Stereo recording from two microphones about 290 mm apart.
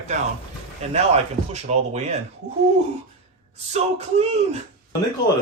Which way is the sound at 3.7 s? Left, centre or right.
Right.